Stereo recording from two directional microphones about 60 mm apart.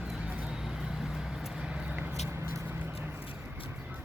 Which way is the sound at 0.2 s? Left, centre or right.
Centre.